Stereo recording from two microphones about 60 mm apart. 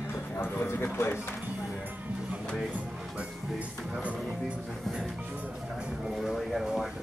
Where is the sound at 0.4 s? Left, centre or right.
Left.